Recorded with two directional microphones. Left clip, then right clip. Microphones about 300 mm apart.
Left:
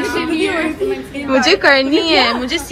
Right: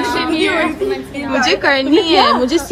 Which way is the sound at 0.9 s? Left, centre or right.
Right.